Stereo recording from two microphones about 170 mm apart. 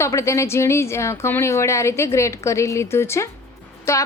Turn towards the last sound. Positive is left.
turn(degrees=15)  # may be behind; listen again after turning